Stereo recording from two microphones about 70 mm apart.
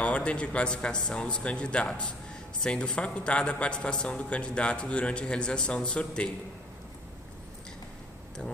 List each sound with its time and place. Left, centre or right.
0.0 s a man's voice: centre